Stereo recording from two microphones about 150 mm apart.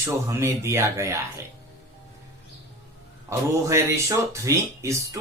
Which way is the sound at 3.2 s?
20° right (ahead or behind).